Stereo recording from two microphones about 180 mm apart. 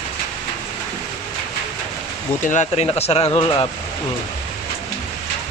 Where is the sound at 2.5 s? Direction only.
40° left (ahead or behind).